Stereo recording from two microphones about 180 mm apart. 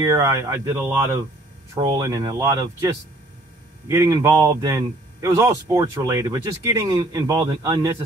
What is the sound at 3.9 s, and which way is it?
Speech, 20° right (ahead or behind).